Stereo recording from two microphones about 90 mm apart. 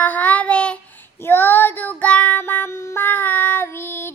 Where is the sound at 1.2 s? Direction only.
25° left (ahead or behind).